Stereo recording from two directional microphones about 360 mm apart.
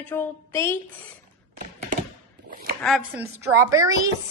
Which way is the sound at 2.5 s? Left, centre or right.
Right.